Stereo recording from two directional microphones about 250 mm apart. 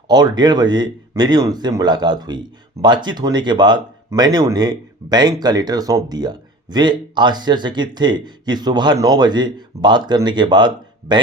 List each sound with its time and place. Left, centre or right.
0.1 s speech: centre